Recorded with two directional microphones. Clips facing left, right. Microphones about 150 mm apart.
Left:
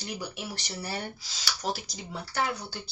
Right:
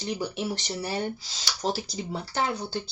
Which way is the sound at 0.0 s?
25° right (ahead or behind).